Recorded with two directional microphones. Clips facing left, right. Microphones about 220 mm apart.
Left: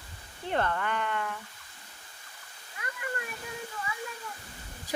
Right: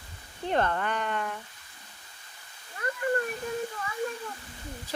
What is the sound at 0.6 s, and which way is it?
Speech, 40° right (ahead or behind).